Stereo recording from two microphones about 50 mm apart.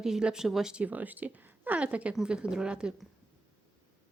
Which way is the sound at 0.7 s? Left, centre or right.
Right.